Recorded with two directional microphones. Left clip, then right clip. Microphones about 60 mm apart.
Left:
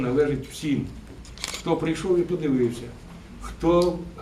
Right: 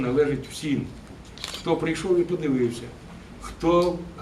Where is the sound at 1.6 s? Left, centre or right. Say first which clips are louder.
Even; centre.